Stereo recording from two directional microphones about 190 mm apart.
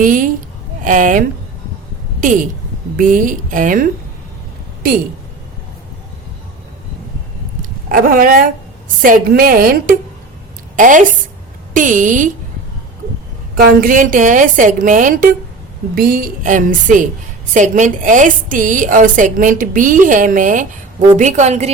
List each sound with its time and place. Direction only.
0.0 s a woman's voice: 45° right (ahead or behind)
2.2 s a woman's voice: 45° right (ahead or behind)
7.6 s a woman's voice: 50° right (ahead or behind)
13.6 s a woman's voice: 50° right (ahead or behind)